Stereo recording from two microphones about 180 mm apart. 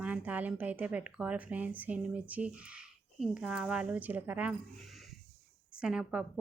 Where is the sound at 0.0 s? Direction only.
10° right (ahead or behind).